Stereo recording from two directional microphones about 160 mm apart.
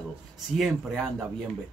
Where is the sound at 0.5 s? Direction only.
Centre (ahead or behind).